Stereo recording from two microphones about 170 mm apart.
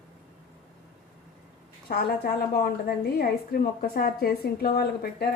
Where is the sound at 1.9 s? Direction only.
65° left (ahead or behind).